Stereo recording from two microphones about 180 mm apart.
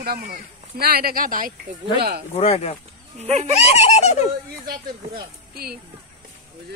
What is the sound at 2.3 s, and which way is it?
Speech, 35° left (ahead or behind).